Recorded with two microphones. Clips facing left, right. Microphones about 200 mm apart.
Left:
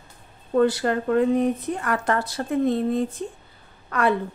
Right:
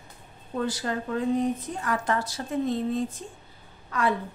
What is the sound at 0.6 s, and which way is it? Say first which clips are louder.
A woman's voice: left 9 dB; 65° left (ahead or behind).